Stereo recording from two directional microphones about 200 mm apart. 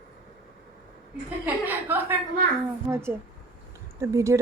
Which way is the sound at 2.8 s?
15° right (ahead or behind).